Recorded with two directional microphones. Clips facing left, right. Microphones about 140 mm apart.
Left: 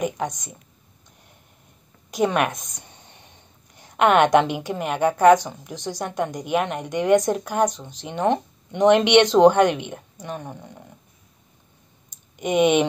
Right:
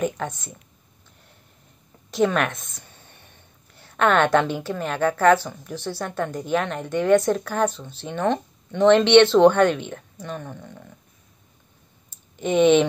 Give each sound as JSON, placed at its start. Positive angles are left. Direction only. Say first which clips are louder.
{"t": 0.0, "sound": "a woman's voice", "louder": "even", "side_deg": 15}
{"t": 2.2, "sound": "a woman's voice", "louder": "left 1 dB", "side_deg": 15}
{"t": 12.1, "sound": "clicking", "louder": "even", "side_deg": 10}